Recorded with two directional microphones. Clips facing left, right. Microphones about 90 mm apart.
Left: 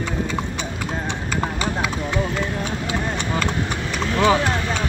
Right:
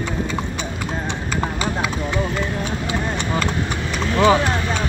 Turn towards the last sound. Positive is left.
turn(degrees=-20)  # may be behind; listen again after turning